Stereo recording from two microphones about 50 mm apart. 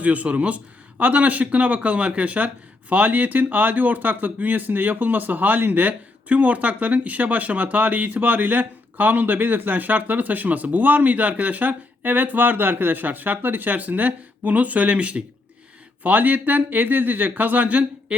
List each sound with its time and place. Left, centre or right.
0.0 s speech: right